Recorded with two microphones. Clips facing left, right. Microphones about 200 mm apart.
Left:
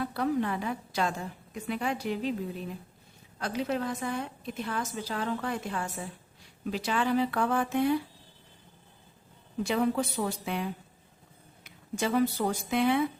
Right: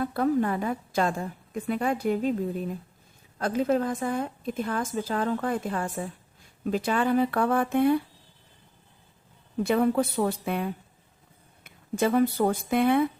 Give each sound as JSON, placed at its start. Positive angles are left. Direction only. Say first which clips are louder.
{"t": 0.0, "sound": "a woman's voice", "louder": "right 4 dB", "side_deg": -50}
{"t": 9.6, "sound": "speech", "louder": "right 5 dB", "side_deg": -55}